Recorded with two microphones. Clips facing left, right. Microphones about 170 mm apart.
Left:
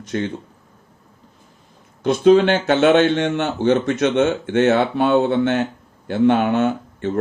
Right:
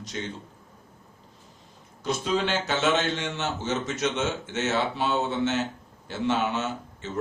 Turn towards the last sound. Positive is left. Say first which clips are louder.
# left 12 dB
turn(degrees=55)  # may be behind; listen again after turning